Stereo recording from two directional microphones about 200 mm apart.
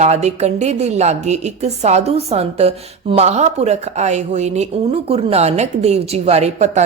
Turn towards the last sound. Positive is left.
turn(degrees=-35)  # may be behind; listen again after turning